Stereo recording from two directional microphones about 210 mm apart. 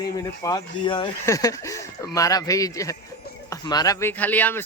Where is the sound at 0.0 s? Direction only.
15° left (ahead or behind).